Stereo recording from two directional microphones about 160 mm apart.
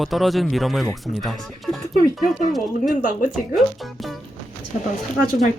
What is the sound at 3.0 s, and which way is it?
Speech, 60° left (ahead or behind).